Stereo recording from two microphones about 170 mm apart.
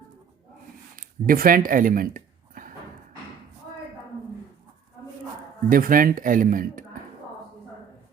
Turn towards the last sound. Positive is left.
turn(degrees=-55)  # may be behind; listen again after turning